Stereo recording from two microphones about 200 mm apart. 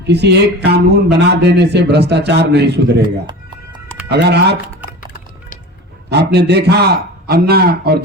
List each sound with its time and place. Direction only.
0.1 s speech: 55° right (ahead or behind)
4.1 s speech: 55° right (ahead or behind)
6.1 s speech: 55° right (ahead or behind)